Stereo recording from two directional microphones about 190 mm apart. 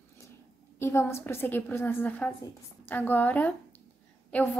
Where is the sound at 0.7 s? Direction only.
15° left (ahead or behind).